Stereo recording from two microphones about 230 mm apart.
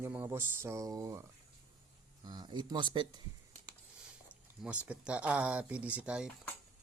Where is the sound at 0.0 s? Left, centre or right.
Centre.